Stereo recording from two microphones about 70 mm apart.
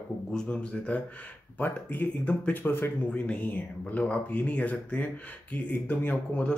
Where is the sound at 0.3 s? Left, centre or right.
Centre.